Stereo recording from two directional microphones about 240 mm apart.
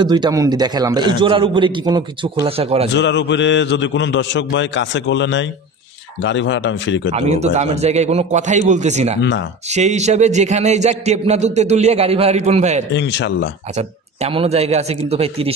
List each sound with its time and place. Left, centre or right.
0.0 s a man's voice: centre
2.9 s a man's voice: left
7.2 s a man's voice: right
9.2 s a man's voice: left
9.7 s a man's voice: right
12.9 s a man's voice: left
13.7 s a man's voice: right